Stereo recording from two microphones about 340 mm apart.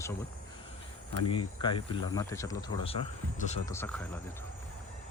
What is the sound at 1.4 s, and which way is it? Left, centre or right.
Speech, centre.